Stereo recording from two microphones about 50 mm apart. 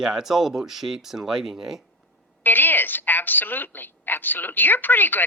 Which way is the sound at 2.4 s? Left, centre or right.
Left.